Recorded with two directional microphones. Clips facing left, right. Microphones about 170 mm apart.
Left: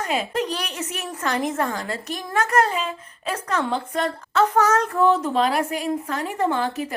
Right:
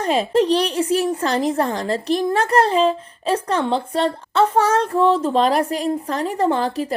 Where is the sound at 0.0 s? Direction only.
30° right (ahead or behind).